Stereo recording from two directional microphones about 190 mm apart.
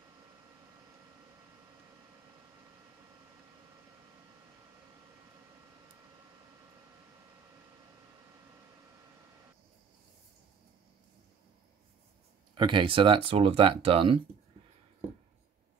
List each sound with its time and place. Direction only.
12.5 s speech: 25° right (ahead or behind)